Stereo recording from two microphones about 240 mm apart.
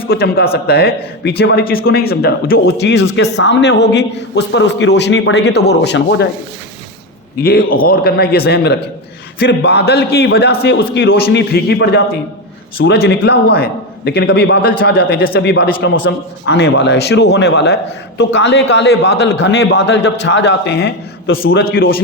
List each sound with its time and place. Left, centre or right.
0.1 s speech: left
7.4 s a man's voice: left